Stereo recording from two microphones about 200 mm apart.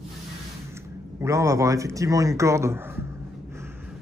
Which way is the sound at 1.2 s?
15° right (ahead or behind).